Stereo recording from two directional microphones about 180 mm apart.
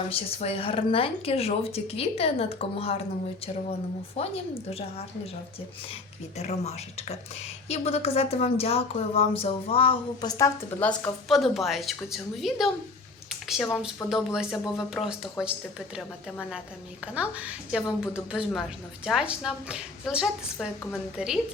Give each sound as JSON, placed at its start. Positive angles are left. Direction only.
{"t": 0.1, "sound": "a woman's voice", "side_deg": 35}
{"t": 4.2, "sound": "a woman's voice", "side_deg": 35}
{"t": 6.3, "sound": "a woman's voice", "side_deg": 40}
{"t": 13.7, "sound": "speech", "side_deg": 0}
{"t": 17.2, "sound": "a woman's voice", "side_deg": -5}